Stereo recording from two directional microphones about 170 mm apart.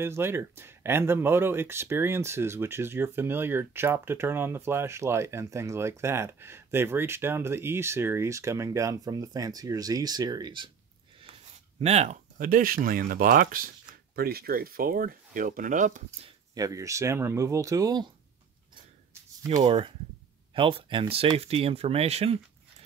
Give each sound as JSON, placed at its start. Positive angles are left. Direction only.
{"t": 0.0, "sound": "speech", "side_deg": -15}
{"t": 11.8, "sound": "speech", "side_deg": -40}
{"t": 16.5, "sound": "speech", "side_deg": -20}
{"t": 19.6, "sound": "speech", "side_deg": -35}